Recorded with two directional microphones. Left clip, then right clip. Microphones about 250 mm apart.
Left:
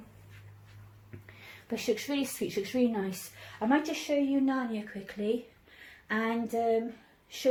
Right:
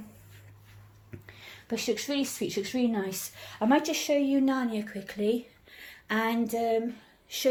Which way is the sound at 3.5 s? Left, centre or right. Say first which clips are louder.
Right 3 dB; right.